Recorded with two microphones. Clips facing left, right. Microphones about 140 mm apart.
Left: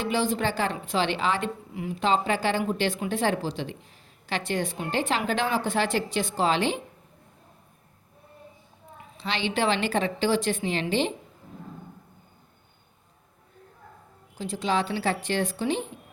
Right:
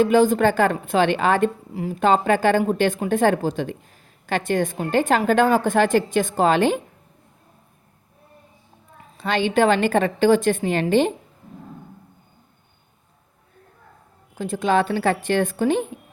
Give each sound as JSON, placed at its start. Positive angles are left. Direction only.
{"t": 0.0, "sound": "a woman's voice", "side_deg": -45}
{"t": 9.1, "sound": "a woman's voice", "side_deg": -50}
{"t": 14.3, "sound": "a woman's voice", "side_deg": -50}